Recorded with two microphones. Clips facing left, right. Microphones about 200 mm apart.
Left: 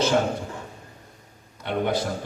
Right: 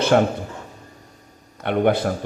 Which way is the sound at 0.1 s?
60° right (ahead or behind).